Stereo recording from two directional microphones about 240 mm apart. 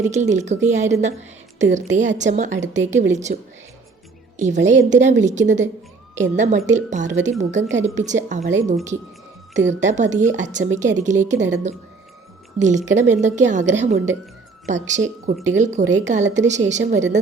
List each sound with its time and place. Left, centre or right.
0.0 s a woman's voice: right
4.4 s a woman's voice: right